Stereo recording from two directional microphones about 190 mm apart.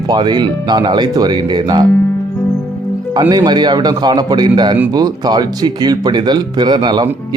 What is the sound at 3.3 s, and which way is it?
Speech, 20° right (ahead or behind).